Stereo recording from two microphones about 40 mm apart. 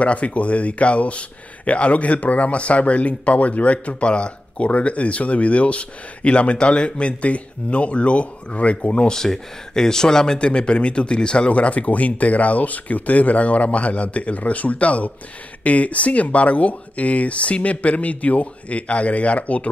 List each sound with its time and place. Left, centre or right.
0.0 s speech: left
9.0 s speech: centre; by 19.7 s left